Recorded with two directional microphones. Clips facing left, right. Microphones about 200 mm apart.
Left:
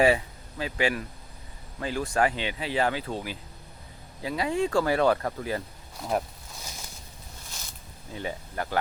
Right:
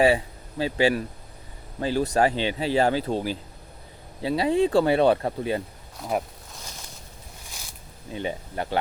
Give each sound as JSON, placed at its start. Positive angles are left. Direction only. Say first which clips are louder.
{"t": 0.6, "sound": "speech", "louder": "right 6 dB", "side_deg": -30}
{"t": 6.0, "sound": "speech", "louder": "right 1 dB", "side_deg": -5}
{"t": 8.1, "sound": "speech", "louder": "right 4 dB", "side_deg": -25}